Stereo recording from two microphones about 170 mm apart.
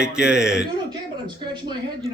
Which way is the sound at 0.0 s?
5° right (ahead or behind).